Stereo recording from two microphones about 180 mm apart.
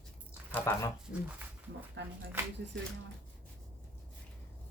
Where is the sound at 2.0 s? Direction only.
75° right (ahead or behind).